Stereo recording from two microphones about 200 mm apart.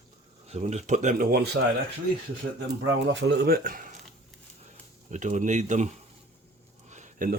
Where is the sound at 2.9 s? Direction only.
65° right (ahead or behind); by 5.9 s 35° right (ahead or behind).